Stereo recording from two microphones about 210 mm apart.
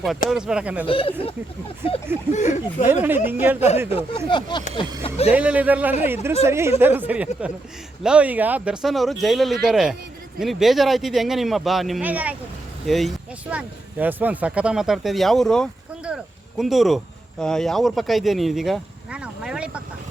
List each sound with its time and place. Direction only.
0.3 s speech: 5° right (ahead or behind)
0.9 s speech: 25° left (ahead or behind)
2.3 s speech: 35° left (ahead or behind)
2.9 s a woman's voice: 10° right (ahead or behind)
3.8 s speech: 25° left (ahead or behind)
5.3 s a woman's voice: 5° right (ahead or behind)